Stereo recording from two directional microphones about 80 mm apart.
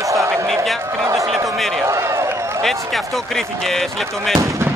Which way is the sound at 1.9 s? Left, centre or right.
Right.